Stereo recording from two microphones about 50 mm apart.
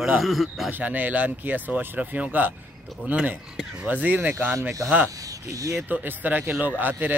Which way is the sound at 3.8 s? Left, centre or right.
Right.